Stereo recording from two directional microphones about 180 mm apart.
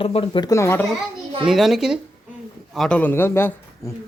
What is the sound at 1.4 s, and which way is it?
A man's voice, centre (ahead or behind).